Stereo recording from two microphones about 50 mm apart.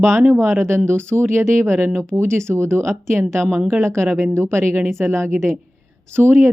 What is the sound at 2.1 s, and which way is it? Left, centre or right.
Speech, right.